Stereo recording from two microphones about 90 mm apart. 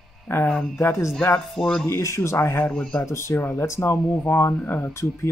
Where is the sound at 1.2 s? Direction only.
10° left (ahead or behind).